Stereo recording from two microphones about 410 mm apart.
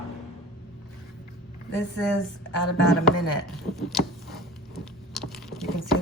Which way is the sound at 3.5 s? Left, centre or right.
Centre.